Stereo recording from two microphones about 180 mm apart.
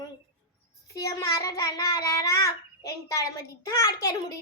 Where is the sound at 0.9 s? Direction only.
20° left (ahead or behind).